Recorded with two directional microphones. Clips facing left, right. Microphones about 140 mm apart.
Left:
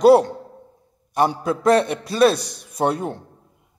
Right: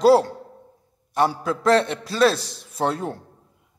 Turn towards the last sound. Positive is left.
turn(degrees=20)  # may be behind; listen again after turning